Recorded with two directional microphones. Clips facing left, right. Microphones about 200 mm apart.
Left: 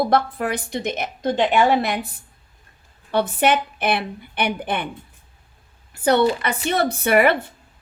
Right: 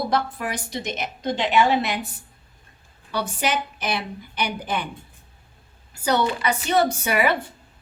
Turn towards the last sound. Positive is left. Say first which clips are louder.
# left 5 dB
turn(degrees=55)  # may be behind; listen again after turning